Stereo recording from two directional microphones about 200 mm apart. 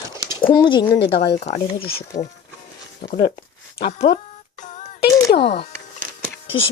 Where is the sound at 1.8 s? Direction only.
50° left (ahead or behind).